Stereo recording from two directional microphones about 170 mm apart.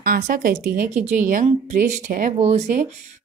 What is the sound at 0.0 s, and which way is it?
A woman's voice, 60° right (ahead or behind).